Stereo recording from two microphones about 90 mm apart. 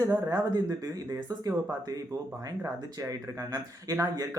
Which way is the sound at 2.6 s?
40° right (ahead or behind).